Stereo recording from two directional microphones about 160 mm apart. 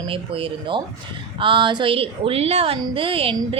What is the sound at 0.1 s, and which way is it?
A woman's voice, 35° right (ahead or behind).